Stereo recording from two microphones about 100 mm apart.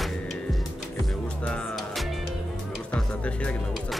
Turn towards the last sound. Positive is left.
turn(degrees=10)  # may be behind; listen again after turning